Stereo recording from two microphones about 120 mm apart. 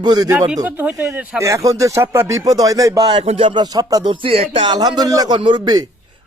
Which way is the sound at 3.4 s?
35° right (ahead or behind).